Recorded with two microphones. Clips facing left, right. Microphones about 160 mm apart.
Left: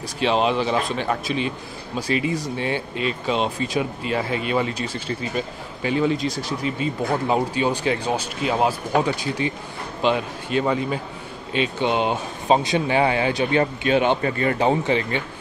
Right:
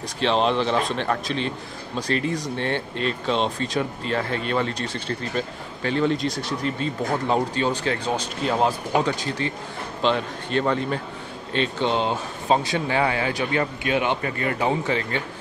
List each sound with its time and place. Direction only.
0.2 s speech: 5° left (ahead or behind)